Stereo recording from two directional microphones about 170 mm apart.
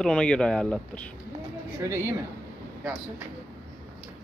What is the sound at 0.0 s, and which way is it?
Speech, 5° left (ahead or behind).